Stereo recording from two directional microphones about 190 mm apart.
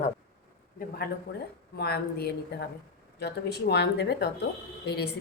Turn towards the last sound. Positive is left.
turn(degrees=60)  # may be behind; listen again after turning